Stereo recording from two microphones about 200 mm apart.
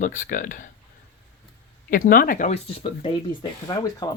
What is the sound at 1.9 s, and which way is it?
Speech, 45° left (ahead or behind).